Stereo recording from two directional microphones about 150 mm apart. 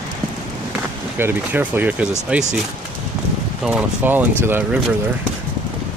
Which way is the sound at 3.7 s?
10° right (ahead or behind).